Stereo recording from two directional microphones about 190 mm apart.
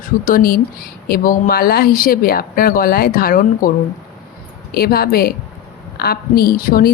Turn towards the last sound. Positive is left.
turn(degrees=50)  # may be behind; listen again after turning